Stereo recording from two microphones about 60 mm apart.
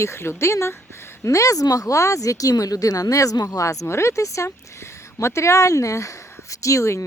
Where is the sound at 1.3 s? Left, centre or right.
Left.